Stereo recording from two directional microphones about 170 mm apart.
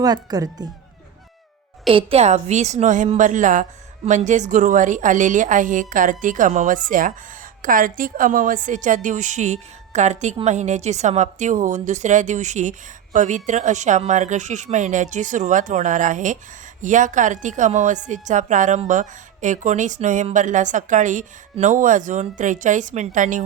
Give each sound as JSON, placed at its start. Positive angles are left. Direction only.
{"t": 0.0, "sound": "speech", "side_deg": -20}
{"t": 1.9, "sound": "a woman's voice", "side_deg": -35}